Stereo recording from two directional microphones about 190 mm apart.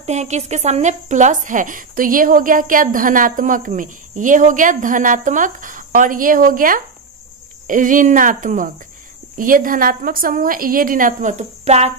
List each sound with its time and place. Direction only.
0.0 s a woman's voice: 35° right (ahead or behind)